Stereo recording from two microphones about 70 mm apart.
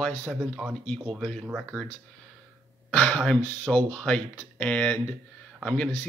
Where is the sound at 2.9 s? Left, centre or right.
Left.